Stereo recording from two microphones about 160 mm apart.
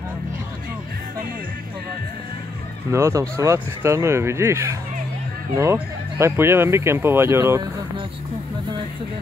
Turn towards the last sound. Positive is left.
turn(degrees=-20)  # may be behind; listen again after turning